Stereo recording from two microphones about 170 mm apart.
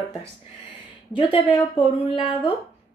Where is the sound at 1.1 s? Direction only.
30° left (ahead or behind).